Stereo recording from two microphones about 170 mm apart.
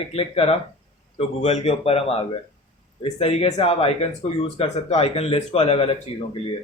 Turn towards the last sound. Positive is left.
turn(degrees=35)  # may be behind; listen again after turning